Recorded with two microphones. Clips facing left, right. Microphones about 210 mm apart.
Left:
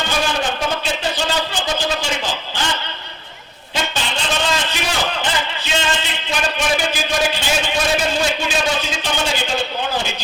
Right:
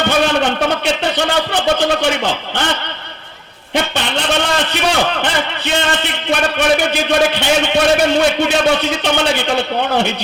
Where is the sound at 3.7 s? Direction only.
65° right (ahead or behind).